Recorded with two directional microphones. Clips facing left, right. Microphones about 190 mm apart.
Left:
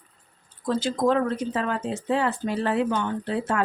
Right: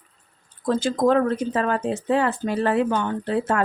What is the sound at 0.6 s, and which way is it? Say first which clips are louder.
Speech: right 3 dB; 50° right (ahead or behind).